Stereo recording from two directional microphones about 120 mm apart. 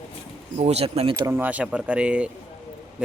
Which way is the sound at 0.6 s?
60° right (ahead or behind).